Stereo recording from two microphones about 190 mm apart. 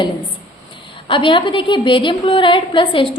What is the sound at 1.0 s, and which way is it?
A woman's voice, 25° left (ahead or behind).